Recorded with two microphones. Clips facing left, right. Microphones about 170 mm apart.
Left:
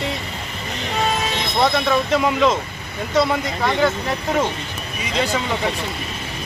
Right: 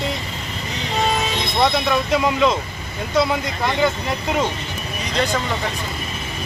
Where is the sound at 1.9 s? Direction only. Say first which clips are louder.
Left 1 dB; centre (ahead or behind).